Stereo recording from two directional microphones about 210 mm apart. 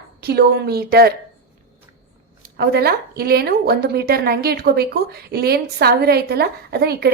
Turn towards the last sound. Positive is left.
turn(degrees=-50)  # may be behind; listen again after turning